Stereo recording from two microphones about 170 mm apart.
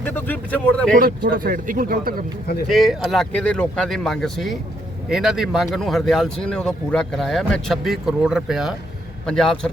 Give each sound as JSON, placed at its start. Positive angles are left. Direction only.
{"t": 0.0, "sound": "speech", "side_deg": 10}
{"t": 0.9, "sound": "speech", "side_deg": -60}
{"t": 2.6, "sound": "speech", "side_deg": 0}